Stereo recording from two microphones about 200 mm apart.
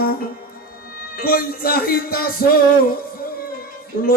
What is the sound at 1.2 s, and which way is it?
Music, 50° left (ahead or behind).